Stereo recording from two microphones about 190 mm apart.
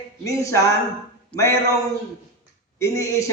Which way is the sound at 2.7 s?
15° left (ahead or behind).